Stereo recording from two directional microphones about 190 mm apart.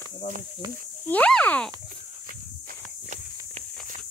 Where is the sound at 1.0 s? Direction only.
5° left (ahead or behind).